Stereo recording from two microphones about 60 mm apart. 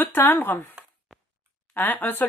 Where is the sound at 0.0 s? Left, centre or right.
Left.